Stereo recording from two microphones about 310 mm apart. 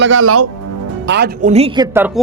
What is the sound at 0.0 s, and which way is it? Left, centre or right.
Speech, right.